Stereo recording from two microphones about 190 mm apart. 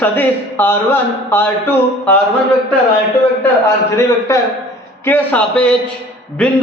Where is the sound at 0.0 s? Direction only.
10° left (ahead or behind).